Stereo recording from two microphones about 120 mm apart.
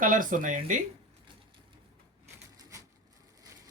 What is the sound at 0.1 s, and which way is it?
Speech, 90° right.